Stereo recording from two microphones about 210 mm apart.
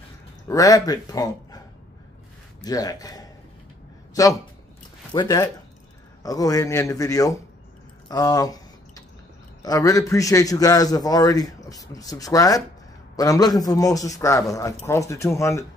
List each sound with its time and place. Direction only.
0.5 s a man's voice: 15° left (ahead or behind)
2.6 s a man's voice: 15° left (ahead or behind)
8.1 s drip: 20° left (ahead or behind)
9.6 s a man's voice: 15° left (ahead or behind)